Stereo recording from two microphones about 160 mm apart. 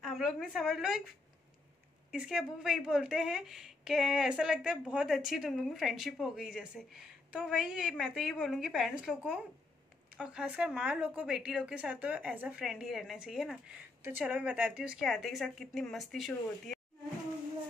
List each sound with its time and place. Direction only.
0.0 s a woman's voice: centre (ahead or behind)
2.0 s a woman's voice: 5° right (ahead or behind)